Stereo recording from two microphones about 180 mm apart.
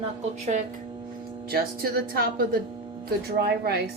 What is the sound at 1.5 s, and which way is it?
Speech, 55° right (ahead or behind).